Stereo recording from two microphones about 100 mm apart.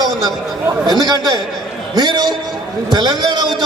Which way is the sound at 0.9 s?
45° right (ahead or behind).